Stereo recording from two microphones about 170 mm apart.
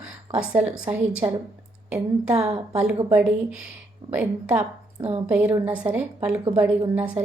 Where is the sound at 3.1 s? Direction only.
10° right (ahead or behind).